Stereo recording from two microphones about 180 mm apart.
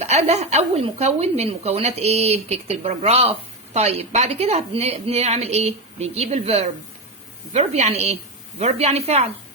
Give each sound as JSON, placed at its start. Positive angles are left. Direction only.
{"t": 0.0, "sound": "a woman's voice", "side_deg": -40}